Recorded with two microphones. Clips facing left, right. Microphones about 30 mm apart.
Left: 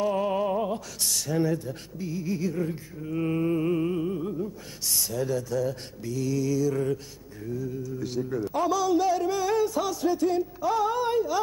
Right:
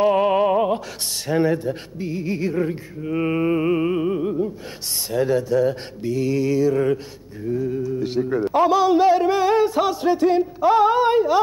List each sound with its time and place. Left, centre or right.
0.0 s opera: right
1.2 s a man's voice: right